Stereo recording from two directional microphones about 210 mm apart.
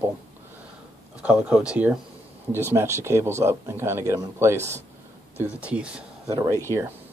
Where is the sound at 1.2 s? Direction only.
5° right (ahead or behind).